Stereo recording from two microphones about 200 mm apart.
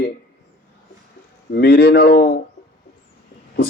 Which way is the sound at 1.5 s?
55° left (ahead or behind).